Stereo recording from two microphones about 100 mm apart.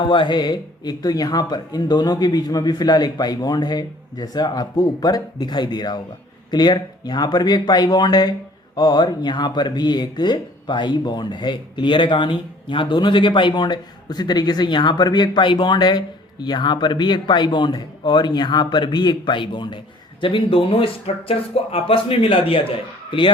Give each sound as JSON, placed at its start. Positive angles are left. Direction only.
{"t": 0.0, "sound": "speech", "side_deg": 50}